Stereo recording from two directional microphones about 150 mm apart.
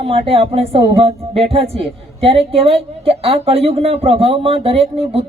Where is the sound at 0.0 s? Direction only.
40° right (ahead or behind).